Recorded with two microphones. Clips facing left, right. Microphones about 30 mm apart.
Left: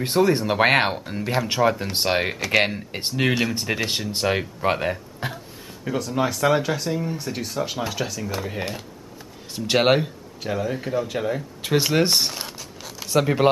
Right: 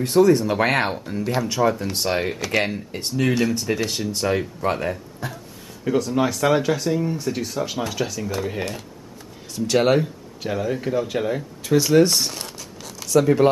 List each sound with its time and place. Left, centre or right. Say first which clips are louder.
0.0 s speech: right 4 dB; left
0.8 s speech: right 1 dB; left
1.5 s speech: left 1 dB; left
2.3 s speech: left 2 dB; centre
2.9 s speech: right 1 dB; left
5.2 s a sound: left 2 dB; left
5.9 s speech: right 3 dB; centre
9.7 s speech: even; left
10.4 s speech: right 2 dB; centre
11.6 s zipper: right 4 dB; left; by 13.1 s centre
13.1 s speech: right 3 dB; left